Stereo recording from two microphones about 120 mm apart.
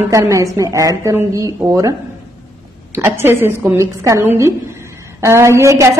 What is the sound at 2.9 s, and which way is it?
A woman's voice, 20° right (ahead or behind).